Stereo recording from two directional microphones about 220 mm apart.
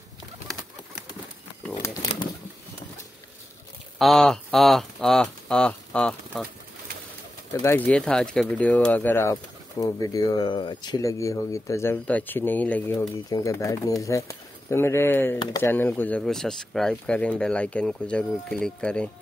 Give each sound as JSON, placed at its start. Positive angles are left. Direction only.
{"t": 1.7, "sound": "crumpling", "side_deg": 15}
{"t": 4.0, "sound": "speech", "side_deg": 0}
{"t": 7.6, "sound": "speech", "side_deg": 10}